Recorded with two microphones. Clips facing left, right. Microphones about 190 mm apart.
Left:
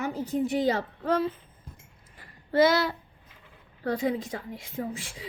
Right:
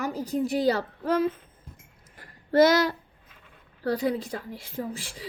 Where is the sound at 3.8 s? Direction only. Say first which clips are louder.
Right 1 dB; 35° right (ahead or behind).